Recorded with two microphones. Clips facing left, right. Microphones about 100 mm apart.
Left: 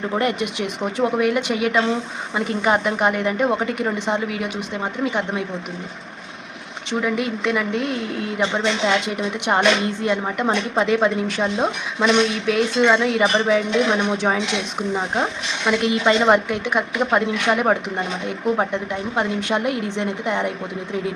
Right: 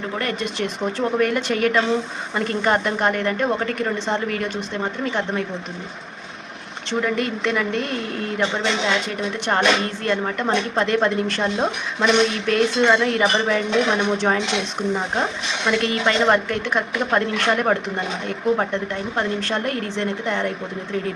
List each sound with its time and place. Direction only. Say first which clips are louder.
0.2 s a woman's voice: left 2 dB; 15° left (ahead or behind)
7.0 s a woman's voice: even; 5° left (ahead or behind)